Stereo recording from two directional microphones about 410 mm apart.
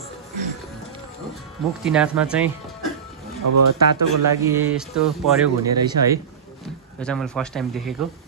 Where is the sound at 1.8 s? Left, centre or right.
Centre.